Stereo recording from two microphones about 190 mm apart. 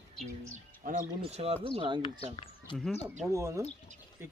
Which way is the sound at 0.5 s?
40° right (ahead or behind).